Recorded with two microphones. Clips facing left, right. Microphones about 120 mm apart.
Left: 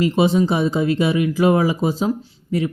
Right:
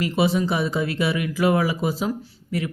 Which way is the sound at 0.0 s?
25° left (ahead or behind).